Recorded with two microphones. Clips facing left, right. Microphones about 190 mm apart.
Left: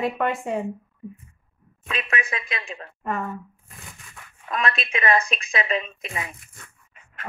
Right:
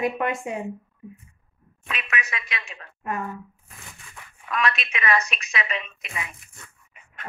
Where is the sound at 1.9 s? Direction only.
30° left (ahead or behind).